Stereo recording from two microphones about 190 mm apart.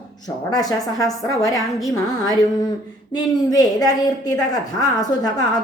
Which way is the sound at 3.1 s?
20° left (ahead or behind).